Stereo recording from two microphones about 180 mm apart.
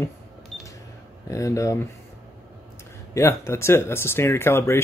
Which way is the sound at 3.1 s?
15° left (ahead or behind).